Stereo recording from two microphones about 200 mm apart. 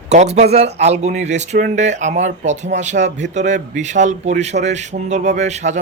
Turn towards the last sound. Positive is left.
turn(degrees=-35)  # may be behind; listen again after turning